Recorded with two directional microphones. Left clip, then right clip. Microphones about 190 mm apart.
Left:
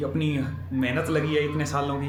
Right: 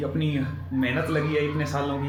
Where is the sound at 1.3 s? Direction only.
25° left (ahead or behind).